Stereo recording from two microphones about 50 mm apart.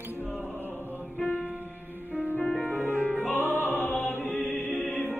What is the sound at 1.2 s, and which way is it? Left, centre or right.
Music, left.